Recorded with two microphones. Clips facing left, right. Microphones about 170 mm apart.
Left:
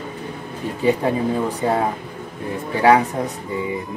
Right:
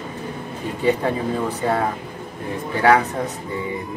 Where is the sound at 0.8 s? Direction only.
15° left (ahead or behind).